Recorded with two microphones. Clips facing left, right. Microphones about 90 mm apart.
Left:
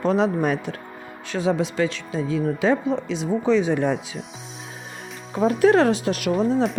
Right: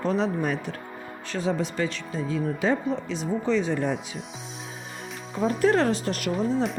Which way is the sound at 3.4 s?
70° left (ahead or behind).